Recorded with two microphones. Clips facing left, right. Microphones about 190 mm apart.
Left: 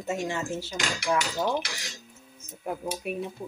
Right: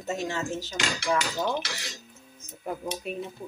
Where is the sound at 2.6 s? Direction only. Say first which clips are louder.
Left 1 dB; 10° left (ahead or behind).